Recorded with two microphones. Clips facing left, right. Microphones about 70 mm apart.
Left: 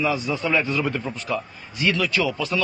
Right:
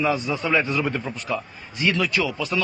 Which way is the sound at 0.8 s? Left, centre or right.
Centre.